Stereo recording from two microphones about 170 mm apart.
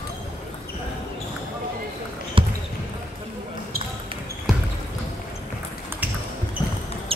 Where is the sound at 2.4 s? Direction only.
30° right (ahead or behind).